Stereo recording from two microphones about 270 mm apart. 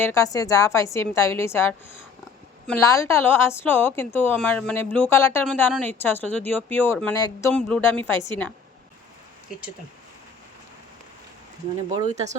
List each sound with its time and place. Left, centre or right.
0.0 s a woman's voice: centre
12.0 s speech: right